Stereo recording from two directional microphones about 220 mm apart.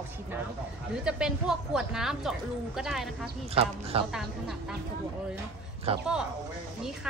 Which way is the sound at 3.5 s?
25° right (ahead or behind).